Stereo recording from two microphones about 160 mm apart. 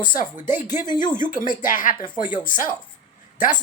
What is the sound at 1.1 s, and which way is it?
Speech, 55° left (ahead or behind).